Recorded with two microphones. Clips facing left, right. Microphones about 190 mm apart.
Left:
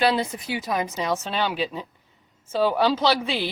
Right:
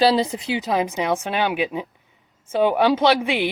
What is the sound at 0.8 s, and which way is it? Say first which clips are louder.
A woman's voice: right 4 dB; 10° right (ahead or behind).